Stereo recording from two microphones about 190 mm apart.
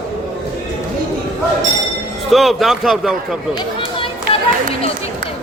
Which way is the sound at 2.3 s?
Centre (ahead or behind).